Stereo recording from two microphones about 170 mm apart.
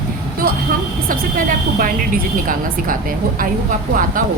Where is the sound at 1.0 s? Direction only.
55° right (ahead or behind).